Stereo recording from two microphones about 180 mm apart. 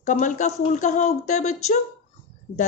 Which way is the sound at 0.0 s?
45° left (ahead or behind).